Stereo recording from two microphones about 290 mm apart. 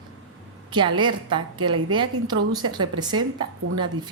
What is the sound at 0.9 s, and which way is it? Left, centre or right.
A woman's voice, centre.